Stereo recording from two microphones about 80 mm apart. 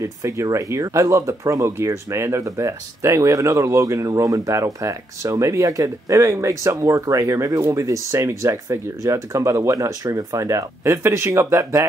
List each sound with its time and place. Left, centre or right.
0.0 s speech: right